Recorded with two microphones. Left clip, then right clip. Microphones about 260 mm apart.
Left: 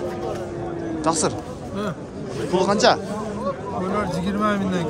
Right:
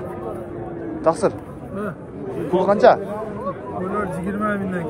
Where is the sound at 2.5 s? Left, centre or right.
Centre.